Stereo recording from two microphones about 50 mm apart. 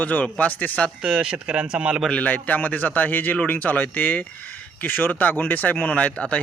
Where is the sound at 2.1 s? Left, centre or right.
Left.